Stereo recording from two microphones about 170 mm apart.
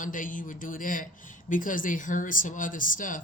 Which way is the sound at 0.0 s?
50° left (ahead or behind).